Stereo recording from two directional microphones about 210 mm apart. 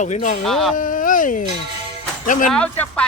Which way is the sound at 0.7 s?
40° left (ahead or behind).